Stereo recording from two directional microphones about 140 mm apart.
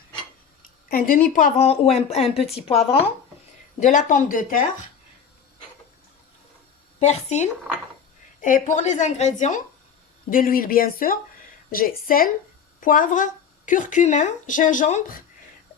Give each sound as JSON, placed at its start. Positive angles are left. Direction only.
{"t": 0.9, "sound": "a woman's voice", "side_deg": 90}
{"t": 1.5, "sound": "speech", "side_deg": 45}
{"t": 3.8, "sound": "speech", "side_deg": 65}
{"t": 7.0, "sound": "speech", "side_deg": 55}
{"t": 8.4, "sound": "a woman's voice", "side_deg": 70}
{"t": 10.2, "sound": "speech", "side_deg": 80}
{"t": 12.8, "sound": "speech", "side_deg": 75}